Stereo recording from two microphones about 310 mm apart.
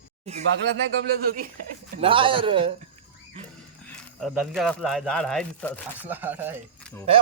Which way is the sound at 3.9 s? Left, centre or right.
Centre.